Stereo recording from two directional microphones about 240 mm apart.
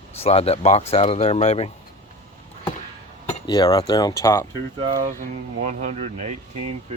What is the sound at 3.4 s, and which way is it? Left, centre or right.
Speech, centre.